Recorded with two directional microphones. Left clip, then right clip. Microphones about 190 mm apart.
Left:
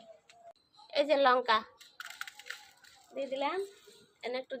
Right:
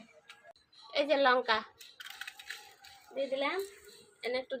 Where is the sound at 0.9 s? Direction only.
10° left (ahead or behind).